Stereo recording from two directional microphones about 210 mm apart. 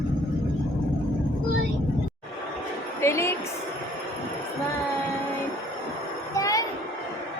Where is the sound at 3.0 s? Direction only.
10° left (ahead or behind).